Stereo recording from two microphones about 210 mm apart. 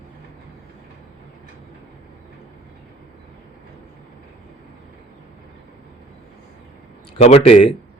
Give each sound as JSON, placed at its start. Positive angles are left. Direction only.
{"t": 7.2, "sound": "speech", "side_deg": 30}